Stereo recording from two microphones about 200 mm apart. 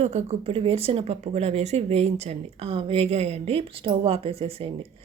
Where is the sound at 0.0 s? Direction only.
35° right (ahead or behind).